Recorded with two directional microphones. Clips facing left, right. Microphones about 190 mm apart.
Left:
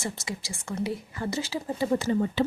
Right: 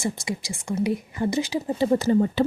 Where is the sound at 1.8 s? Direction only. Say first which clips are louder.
Right 5 dB; 40° right (ahead or behind).